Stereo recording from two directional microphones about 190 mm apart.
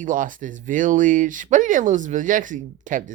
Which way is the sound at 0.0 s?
45° right (ahead or behind).